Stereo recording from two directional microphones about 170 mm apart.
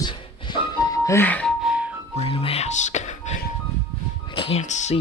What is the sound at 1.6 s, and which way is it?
Music, 5° right (ahead or behind).